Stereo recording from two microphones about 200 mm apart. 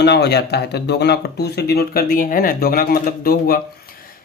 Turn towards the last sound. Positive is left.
turn(degrees=45)  # may be behind; listen again after turning